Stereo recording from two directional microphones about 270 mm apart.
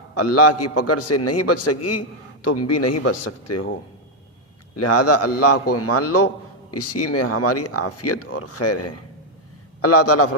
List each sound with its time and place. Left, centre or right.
0.1 s a man's voice: left
4.8 s a man's voice: left